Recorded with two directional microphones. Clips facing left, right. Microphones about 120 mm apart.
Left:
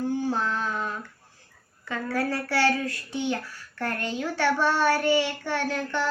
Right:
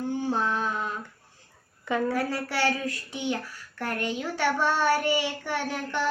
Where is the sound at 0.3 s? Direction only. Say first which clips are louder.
Even; 15° right (ahead or behind).